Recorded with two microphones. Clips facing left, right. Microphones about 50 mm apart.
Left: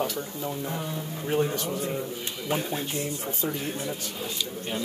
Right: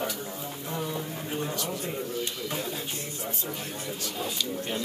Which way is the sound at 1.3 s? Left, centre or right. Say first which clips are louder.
Left 9 dB; left.